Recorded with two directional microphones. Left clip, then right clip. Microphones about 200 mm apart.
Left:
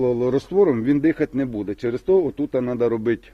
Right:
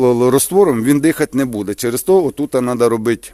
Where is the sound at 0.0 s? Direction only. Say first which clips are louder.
Right 8 dB; 65° right (ahead or behind).